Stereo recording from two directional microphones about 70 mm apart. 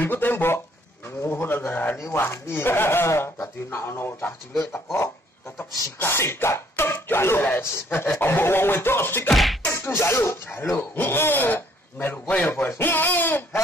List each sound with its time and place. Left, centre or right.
0.0 s a sound: left
1.2 s bird: left
2.1 s speech: left
5.9 s a man's voice: left
9.3 s a sound: centre
9.7 s a man's voice: left